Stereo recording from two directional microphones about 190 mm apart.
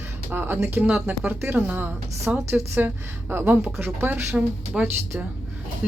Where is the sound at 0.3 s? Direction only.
10° right (ahead or behind).